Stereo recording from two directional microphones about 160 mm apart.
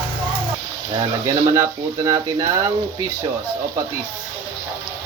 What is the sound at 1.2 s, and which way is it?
Speech, 20° right (ahead or behind).